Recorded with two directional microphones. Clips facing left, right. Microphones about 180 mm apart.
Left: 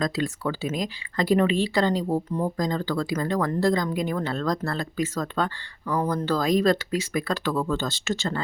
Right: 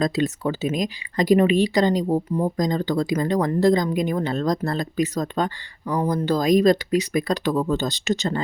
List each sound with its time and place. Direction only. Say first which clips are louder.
0.0 s speech: right 4 dB; 20° right (ahead or behind)